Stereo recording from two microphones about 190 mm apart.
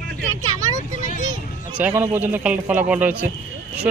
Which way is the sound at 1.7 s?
10° right (ahead or behind).